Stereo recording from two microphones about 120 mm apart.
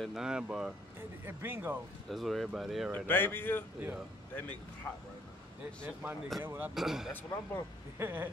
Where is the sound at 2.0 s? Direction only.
Centre (ahead or behind).